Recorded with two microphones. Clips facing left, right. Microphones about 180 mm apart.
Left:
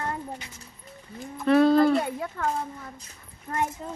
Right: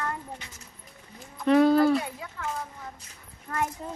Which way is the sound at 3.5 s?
25° left (ahead or behind).